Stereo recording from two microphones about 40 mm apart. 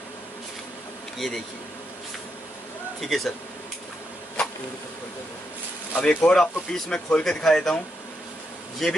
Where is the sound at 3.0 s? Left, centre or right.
Centre.